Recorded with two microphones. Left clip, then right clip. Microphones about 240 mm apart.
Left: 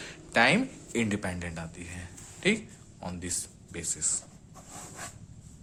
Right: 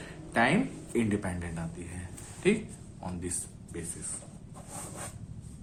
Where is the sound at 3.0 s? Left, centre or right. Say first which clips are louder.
Left 1 dB; left.